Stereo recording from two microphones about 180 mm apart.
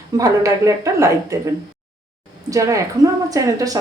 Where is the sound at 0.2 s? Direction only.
20° right (ahead or behind).